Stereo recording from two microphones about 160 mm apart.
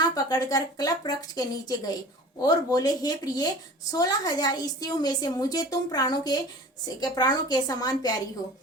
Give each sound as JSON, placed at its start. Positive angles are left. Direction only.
{"t": 0.0, "sound": "a woman's voice", "side_deg": 25}